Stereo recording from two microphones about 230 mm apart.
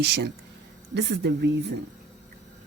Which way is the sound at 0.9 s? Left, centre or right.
Right.